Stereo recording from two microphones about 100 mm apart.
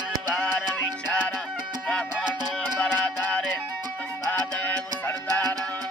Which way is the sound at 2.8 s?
15° left (ahead or behind).